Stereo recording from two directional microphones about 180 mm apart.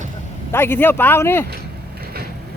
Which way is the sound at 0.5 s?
10° left (ahead or behind).